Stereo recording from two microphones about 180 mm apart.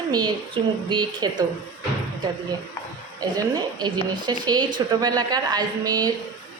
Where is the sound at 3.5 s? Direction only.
25° right (ahead or behind).